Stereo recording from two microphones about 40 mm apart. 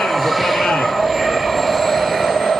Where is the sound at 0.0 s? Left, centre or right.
Centre.